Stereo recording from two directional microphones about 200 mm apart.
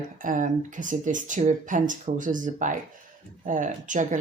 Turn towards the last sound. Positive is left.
turn(degrees=-40)  # may be behind; listen again after turning